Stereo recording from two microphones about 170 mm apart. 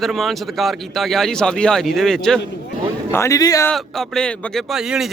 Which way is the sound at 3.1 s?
15° left (ahead or behind).